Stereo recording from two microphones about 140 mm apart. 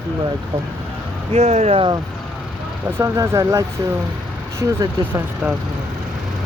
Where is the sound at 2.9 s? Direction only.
20° right (ahead or behind).